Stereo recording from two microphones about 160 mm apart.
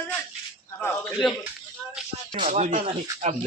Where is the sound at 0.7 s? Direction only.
5° left (ahead or behind).